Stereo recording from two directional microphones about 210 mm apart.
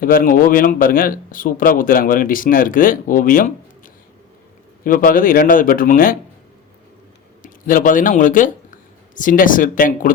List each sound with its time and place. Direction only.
0.0 s a man's voice: 40° left (ahead or behind)
4.8 s a man's voice: 40° left (ahead or behind)
7.4 s speech: 40° left (ahead or behind)